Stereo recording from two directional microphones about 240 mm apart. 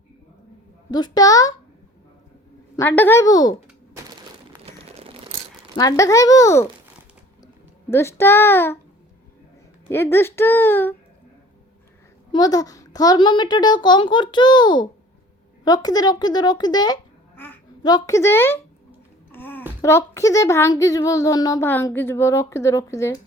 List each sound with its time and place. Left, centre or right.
0.9 s speech: centre
2.7 s speech: centre
4.6 s a sound: right
5.7 s speech: centre
9.9 s speech: centre
12.3 s a child's voice: centre
19.3 s a sound: centre
19.8 s speech: centre